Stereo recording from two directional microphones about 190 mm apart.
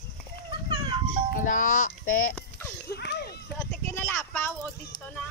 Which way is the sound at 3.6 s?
10° left (ahead or behind).